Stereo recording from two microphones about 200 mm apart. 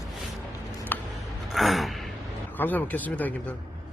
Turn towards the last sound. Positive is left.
turn(degrees=10)  # may be behind; listen again after turning